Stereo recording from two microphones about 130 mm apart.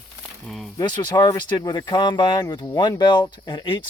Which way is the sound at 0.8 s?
35° left (ahead or behind).